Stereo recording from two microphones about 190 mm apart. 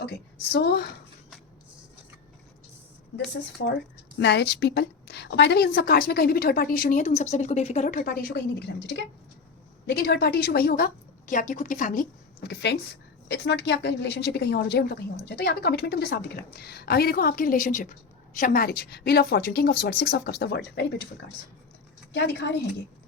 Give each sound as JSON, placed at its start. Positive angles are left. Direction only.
{"t": 0.5, "sound": "a woman's voice", "side_deg": 60}
{"t": 3.6, "sound": "speech", "side_deg": 90}
{"t": 4.2, "sound": "a woman's voice", "side_deg": 60}
{"t": 12.4, "sound": "a woman's voice", "side_deg": 60}
{"t": 22.1, "sound": "a woman's voice", "side_deg": 70}